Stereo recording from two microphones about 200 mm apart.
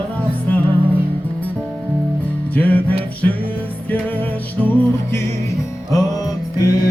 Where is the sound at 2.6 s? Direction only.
5° left (ahead or behind).